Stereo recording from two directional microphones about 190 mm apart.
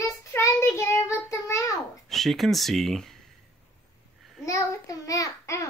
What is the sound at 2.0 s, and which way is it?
Speech, centre (ahead or behind).